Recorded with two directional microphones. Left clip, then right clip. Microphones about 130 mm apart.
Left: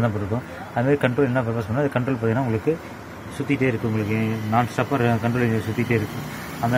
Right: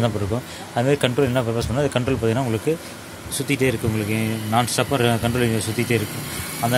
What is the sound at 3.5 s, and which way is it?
Speech, 25° right (ahead or behind).